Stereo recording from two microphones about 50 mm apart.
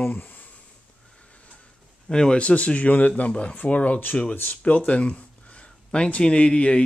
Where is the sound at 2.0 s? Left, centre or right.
Centre.